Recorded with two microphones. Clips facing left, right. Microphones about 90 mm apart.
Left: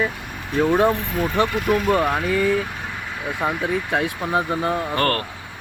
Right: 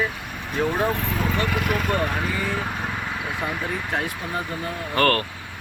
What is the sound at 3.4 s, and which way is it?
Speech, 60° left (ahead or behind).